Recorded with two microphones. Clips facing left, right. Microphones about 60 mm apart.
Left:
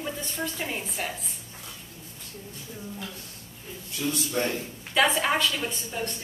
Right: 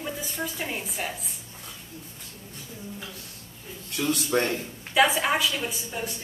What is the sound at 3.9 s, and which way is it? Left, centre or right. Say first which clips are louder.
Speech: right 4 dB; right.